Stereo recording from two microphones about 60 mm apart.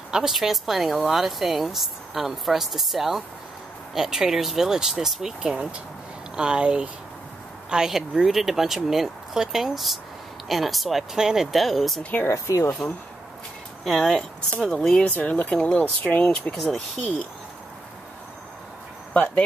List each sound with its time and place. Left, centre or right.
0.1 s speech: centre
12.0 s speech: left
12.3 s speech: left
13.8 s speech: centre
15.0 s speech: left
16.5 s speech: centre
19.1 s speech: left